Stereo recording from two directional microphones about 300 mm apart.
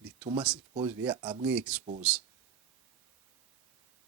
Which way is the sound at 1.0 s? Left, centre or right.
Centre.